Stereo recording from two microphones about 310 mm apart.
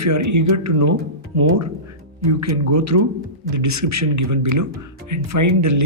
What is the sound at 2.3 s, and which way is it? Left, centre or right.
Speech, right.